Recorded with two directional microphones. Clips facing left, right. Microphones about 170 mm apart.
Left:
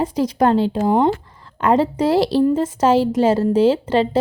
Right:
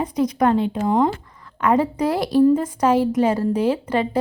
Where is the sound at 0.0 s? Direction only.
30° left (ahead or behind).